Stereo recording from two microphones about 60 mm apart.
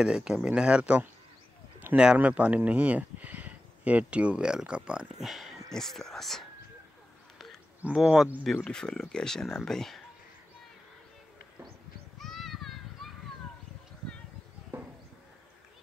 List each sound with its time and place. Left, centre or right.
0.0 s speech: centre
1.9 s a sound: right
2.3 s speech: right
5.2 s speech: centre
7.9 s speech: centre
8.6 s speech: centre
12.2 s children playing: centre